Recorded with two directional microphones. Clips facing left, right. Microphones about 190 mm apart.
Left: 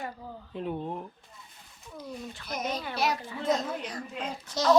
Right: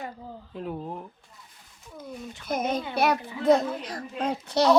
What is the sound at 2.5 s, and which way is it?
A child's voice, 55° right (ahead or behind).